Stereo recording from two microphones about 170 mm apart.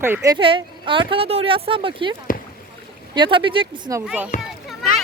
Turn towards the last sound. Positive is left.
turn(degrees=0)  # may be behind; listen again after turning